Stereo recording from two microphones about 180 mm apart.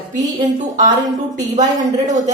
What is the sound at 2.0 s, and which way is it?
Speech, 40° right (ahead or behind).